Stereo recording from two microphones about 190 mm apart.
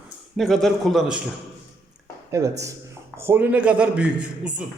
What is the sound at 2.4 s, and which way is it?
A man's voice, 15° right (ahead or behind).